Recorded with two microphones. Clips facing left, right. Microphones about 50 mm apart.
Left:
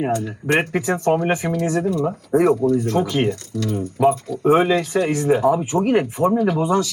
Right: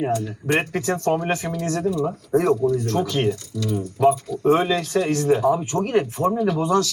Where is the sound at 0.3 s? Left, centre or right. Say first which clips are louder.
Left 3 dB; left.